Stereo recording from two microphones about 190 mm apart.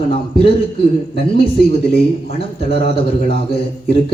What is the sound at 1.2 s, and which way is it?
Speech, 30° left (ahead or behind).